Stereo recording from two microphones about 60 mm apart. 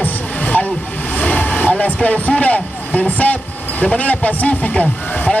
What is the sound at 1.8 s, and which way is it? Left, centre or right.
A man's voice, left.